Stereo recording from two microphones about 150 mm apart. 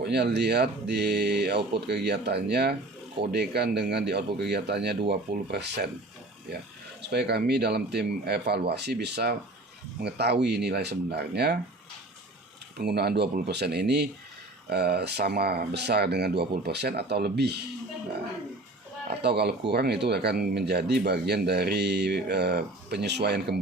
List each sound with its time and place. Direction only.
0.0 s speech: 90° right
7.0 s speech: 90° right
12.7 s speech: 90° right
19.2 s speech: 90° right